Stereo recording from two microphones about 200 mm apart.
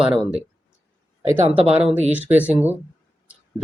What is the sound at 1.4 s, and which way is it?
Speech, 30° right (ahead or behind).